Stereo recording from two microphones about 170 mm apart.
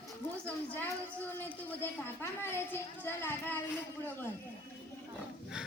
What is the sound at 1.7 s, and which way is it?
A woman's voice, 15° left (ahead or behind).